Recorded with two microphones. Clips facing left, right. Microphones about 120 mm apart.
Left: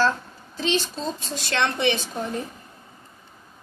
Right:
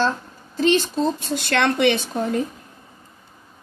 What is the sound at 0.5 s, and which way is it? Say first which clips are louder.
A woman's voice: right 7 dB; 50° right (ahead or behind).